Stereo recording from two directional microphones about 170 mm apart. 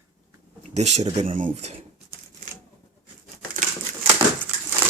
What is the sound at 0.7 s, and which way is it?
Speech, 40° right (ahead or behind).